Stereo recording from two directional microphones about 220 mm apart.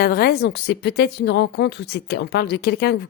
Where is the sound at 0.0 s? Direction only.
45° left (ahead or behind).